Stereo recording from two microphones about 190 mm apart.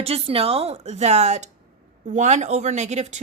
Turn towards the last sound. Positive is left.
turn(degrees=-35)  # may be behind; listen again after turning